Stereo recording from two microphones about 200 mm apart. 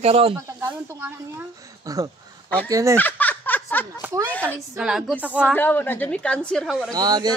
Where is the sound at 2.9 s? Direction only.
10° left (ahead or behind).